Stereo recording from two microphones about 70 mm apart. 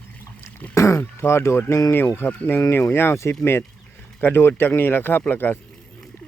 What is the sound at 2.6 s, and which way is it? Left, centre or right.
Speech, left.